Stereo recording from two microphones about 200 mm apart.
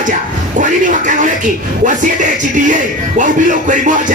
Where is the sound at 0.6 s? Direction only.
40° right (ahead or behind).